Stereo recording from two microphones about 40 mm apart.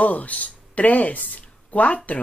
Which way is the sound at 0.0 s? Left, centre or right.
Left.